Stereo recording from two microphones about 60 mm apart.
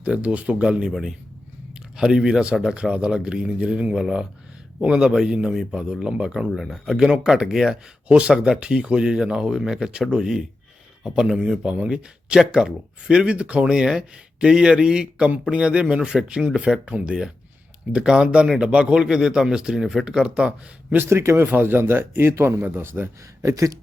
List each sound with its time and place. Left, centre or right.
0.0 s speech: right
0.9 s a man's voice: centre
8.0 s speech: right
8.3 s speech: centre
20.9 s speech: right
21.4 s speech: right
23.4 s speech: right